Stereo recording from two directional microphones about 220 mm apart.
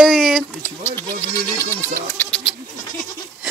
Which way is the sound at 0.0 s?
Centre (ahead or behind).